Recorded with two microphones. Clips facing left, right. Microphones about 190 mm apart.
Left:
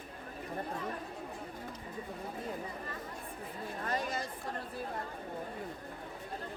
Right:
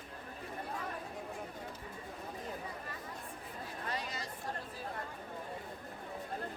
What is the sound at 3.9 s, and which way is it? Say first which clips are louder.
Chatter: left 6 dB; 50° left (ahead or behind).